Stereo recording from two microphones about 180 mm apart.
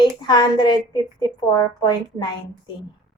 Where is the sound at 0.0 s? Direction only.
25° left (ahead or behind).